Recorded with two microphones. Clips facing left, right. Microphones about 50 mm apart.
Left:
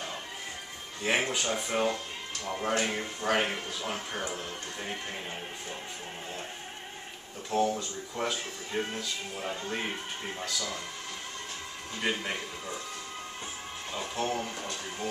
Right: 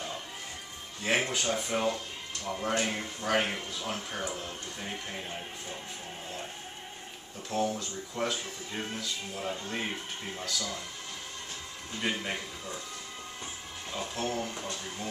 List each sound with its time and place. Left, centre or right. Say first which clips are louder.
1.0 s speech: even; centre
7.5 s speech: left 3 dB; centre
12.0 s speech: left 1 dB; centre
13.9 s speech: left 1 dB; centre